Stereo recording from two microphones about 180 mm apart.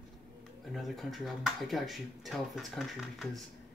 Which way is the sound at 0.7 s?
Centre (ahead or behind).